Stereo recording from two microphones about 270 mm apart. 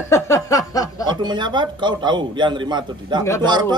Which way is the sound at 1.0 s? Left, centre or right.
Centre.